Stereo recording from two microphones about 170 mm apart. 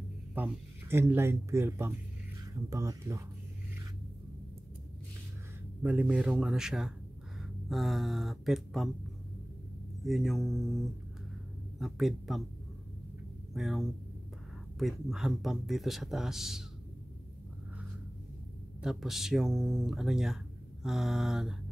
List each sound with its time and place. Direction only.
0.3 s speech: 10° right (ahead or behind)
5.8 s speech: 10° right (ahead or behind)
10.0 s speech: centre (ahead or behind)
13.5 s speech: centre (ahead or behind)
18.8 s speech: centre (ahead or behind)